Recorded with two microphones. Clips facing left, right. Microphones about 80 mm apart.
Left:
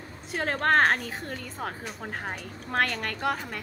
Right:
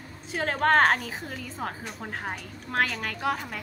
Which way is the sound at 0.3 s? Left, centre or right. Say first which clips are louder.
Right 1 dB; centre.